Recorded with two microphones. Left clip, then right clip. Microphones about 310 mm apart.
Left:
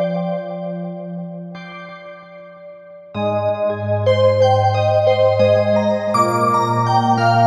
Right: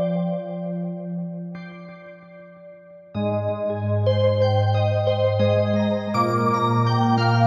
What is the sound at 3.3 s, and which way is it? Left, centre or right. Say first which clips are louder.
Music: left 6 dB; left.